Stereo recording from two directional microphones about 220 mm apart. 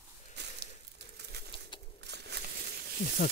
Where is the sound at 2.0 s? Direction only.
50° right (ahead or behind).